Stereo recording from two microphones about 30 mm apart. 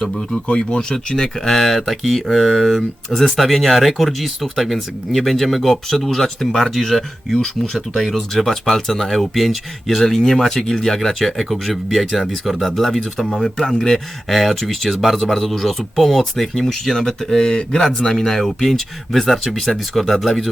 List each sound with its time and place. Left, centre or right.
0.4 s speech: left
1.5 s speech: centre
10.0 s speech: centre
11.3 s speech: centre
14.3 s speech: centre
15.0 s a man's voice: centre
15.3 s speech: centre
16.6 s speech: centre
17.7 s speech: centre